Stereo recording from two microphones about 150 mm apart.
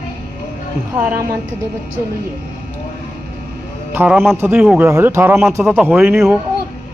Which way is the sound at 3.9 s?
10° right (ahead or behind).